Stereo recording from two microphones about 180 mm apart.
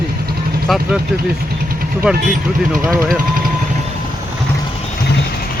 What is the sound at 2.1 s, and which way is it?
Speech, centre (ahead or behind).